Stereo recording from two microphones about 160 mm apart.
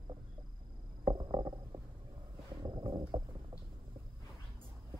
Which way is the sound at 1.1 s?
25° right (ahead or behind).